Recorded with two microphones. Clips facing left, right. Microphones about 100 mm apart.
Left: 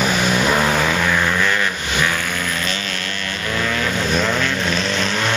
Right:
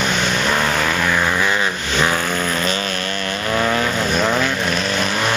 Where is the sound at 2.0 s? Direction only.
35° right (ahead or behind).